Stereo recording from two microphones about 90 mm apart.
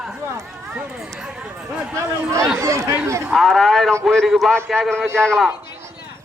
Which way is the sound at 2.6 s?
35° right (ahead or behind).